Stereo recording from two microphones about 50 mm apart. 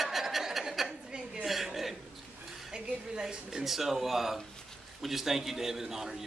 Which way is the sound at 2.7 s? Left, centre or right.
Centre.